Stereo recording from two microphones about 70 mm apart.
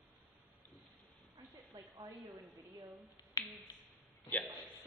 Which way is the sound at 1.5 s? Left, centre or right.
Right.